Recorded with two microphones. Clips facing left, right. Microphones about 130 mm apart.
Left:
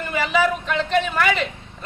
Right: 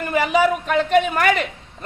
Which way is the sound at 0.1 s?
45° right (ahead or behind).